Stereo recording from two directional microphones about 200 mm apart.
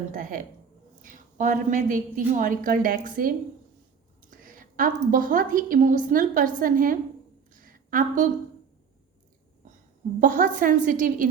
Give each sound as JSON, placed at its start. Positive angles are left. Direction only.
{"t": 0.1, "sound": "a woman's voice", "side_deg": -40}
{"t": 4.3, "sound": "a woman's voice", "side_deg": -45}
{"t": 7.6, "sound": "a sound", "side_deg": -45}
{"t": 10.2, "sound": "a woman's voice", "side_deg": -45}